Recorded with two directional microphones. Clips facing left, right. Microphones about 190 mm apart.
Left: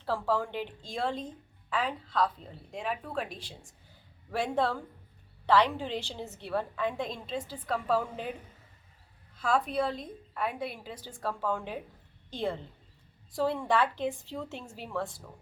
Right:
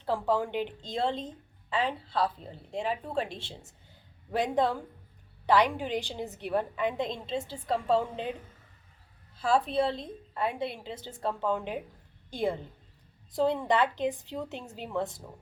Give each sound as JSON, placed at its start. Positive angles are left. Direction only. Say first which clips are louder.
{"t": 0.0, "sound": "a woman's voice", "louder": "right 2 dB", "side_deg": -15}
{"t": 9.4, "sound": "a woman's voice", "louder": "right 2 dB", "side_deg": -30}